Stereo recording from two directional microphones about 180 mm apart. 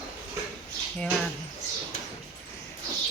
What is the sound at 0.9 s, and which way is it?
Speech, 5° left (ahead or behind).